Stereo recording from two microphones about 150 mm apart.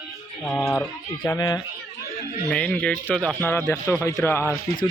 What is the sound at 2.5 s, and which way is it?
Speech, 10° left (ahead or behind).